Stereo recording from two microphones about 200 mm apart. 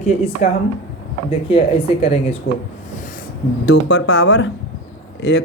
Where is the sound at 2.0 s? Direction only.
30° left (ahead or behind).